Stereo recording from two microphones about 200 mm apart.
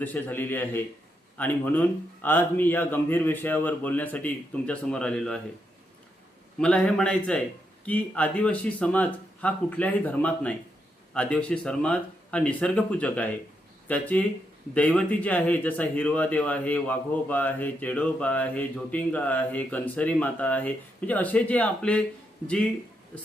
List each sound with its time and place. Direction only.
0.0 s speech: 10° left (ahead or behind)
6.6 s speech: 5° left (ahead or behind)